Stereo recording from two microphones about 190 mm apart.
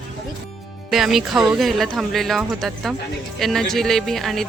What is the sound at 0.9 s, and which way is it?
Speech, centre (ahead or behind).